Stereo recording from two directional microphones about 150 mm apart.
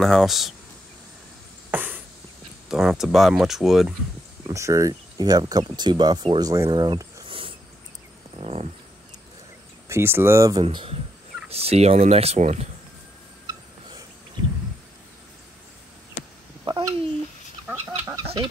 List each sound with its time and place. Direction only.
0.0 s speech: centre (ahead or behind)
1.7 s a sound: 10° right (ahead or behind)
2.7 s speech: 5° right (ahead or behind)
4.5 s speech: 20° right (ahead or behind); by 8.6 s 45° right (ahead or behind)
9.8 s speech: 15° right (ahead or behind)
10.6 s speech: 35° right (ahead or behind)
16.6 s babbling: 30° right (ahead or behind)
17.6 s chicken: 20° right (ahead or behind)
18.2 s chicken: 35° right (ahead or behind)